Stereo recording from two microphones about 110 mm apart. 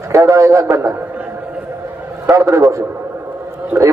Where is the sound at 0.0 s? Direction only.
30° right (ahead or behind).